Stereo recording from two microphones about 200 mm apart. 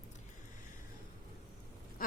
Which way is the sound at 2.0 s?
45° left (ahead or behind).